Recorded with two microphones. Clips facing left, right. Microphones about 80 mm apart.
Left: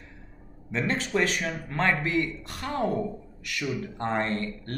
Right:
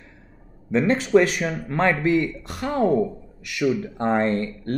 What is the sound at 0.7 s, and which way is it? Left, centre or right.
Speech, centre.